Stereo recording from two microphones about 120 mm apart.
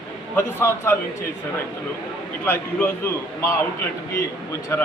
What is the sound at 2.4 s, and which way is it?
A man's voice, 20° left (ahead or behind).